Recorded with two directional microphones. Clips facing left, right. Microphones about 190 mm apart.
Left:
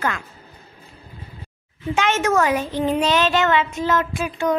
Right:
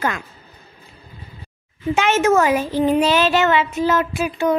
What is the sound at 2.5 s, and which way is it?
Child singing, 10° right (ahead or behind).